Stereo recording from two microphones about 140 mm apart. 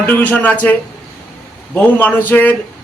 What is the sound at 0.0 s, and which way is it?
A man's voice, 10° left (ahead or behind).